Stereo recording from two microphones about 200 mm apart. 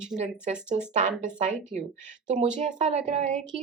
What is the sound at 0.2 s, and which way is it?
Speech, 35° right (ahead or behind).